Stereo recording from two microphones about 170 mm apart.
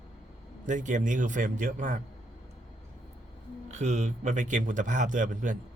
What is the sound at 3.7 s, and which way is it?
Speech, 45° right (ahead or behind).